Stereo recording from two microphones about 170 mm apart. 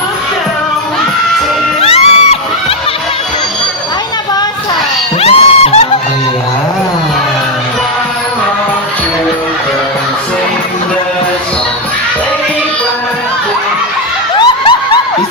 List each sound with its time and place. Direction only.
1.8 s music: 35° left (ahead or behind)
5.2 s music: 35° left (ahead or behind)
14.3 s a sound: 30° left (ahead or behind)